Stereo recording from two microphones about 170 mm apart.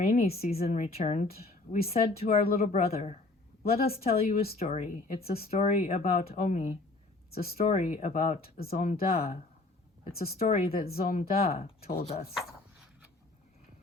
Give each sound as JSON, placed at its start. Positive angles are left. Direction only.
{"t": 0.4, "sound": "a woman's voice", "side_deg": 55}
{"t": 7.3, "sound": "speech", "side_deg": 65}
{"t": 7.5, "sound": "speech", "side_deg": 40}
{"t": 8.4, "sound": "speech", "side_deg": 65}
{"t": 8.8, "sound": "speech", "side_deg": 45}
{"t": 10.1, "sound": "speech", "side_deg": 65}
{"t": 10.3, "sound": "a woman's voice", "side_deg": 40}
{"t": 10.7, "sound": "speech", "side_deg": 60}
{"t": 11.4, "sound": "a woman's voice", "side_deg": 35}